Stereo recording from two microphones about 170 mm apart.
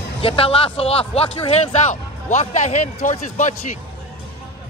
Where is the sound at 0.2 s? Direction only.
35° left (ahead or behind).